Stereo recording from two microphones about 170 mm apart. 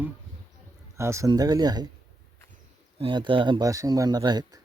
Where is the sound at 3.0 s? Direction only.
30° right (ahead or behind).